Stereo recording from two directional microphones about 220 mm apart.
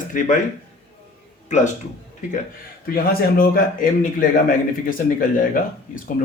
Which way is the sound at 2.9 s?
45° left (ahead or behind).